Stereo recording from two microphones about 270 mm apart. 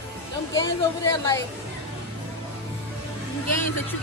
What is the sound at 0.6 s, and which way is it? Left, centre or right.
Speech, centre.